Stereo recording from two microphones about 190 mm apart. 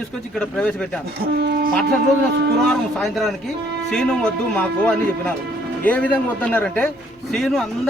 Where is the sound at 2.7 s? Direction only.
Centre (ahead or behind).